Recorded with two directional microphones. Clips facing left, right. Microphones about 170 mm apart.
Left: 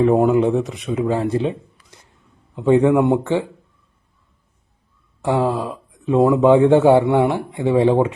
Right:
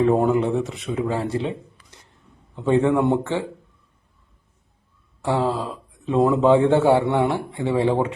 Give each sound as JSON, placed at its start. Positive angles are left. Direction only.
{"t": 0.0, "sound": "speech", "side_deg": 20}
{"t": 2.6, "sound": "speech", "side_deg": 15}
{"t": 5.2, "sound": "speech", "side_deg": 15}